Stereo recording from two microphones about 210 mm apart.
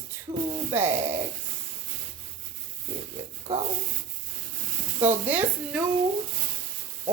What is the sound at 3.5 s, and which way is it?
Rub, 25° right (ahead or behind).